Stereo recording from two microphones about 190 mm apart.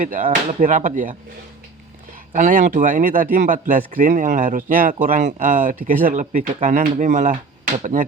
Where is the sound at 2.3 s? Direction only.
40° right (ahead or behind).